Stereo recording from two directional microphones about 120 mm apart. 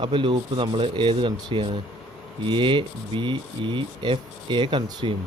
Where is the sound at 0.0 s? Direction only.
45° right (ahead or behind).